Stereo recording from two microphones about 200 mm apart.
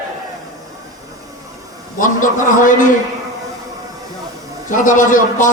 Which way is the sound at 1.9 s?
40° left (ahead or behind).